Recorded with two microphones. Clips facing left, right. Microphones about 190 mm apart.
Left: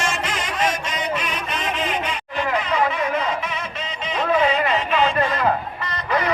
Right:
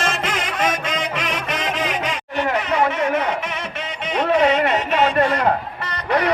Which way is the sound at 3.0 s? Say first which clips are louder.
Right 2 dB; 65° right (ahead or behind).